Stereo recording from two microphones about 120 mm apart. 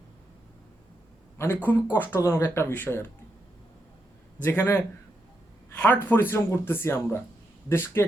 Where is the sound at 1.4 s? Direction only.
15° left (ahead or behind).